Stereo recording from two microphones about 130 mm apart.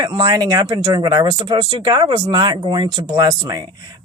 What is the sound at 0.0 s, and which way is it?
Speech, 30° right (ahead or behind).